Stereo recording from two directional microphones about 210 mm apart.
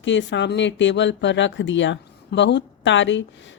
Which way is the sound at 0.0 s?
60° left (ahead or behind).